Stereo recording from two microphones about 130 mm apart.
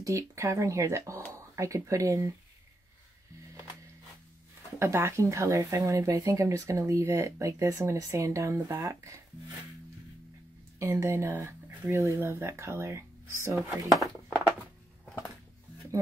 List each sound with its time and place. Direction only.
0.0 s speech: 25° right (ahead or behind)
4.7 s speech: 20° right (ahead or behind)
10.8 s speech: 20° right (ahead or behind)
15.9 s speech: 25° right (ahead or behind)